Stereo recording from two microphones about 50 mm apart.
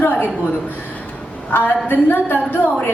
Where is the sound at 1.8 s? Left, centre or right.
Left.